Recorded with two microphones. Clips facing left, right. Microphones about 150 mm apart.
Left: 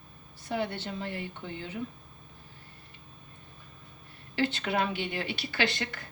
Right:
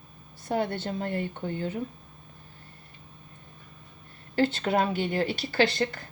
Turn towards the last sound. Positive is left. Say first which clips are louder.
# right 6 dB
turn(degrees=-40)  # may be behind; listen again after turning